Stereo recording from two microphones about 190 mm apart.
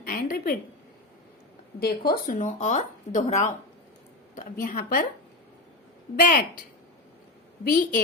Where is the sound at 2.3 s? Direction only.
40° left (ahead or behind).